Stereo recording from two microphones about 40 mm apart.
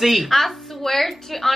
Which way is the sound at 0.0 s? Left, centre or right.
Centre.